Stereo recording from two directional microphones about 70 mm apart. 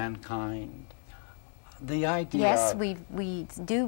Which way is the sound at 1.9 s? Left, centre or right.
Left.